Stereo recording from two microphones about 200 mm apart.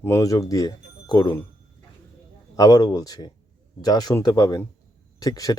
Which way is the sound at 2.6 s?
20° left (ahead or behind).